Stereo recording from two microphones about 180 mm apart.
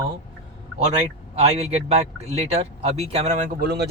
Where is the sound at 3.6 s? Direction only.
65° right (ahead or behind).